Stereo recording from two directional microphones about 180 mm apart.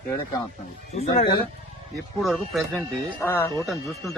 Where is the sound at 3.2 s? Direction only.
15° left (ahead or behind).